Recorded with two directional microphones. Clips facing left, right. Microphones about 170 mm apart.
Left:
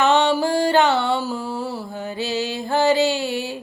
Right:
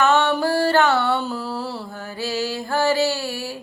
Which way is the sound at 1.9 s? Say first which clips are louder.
Left 2 dB; 20° left (ahead or behind).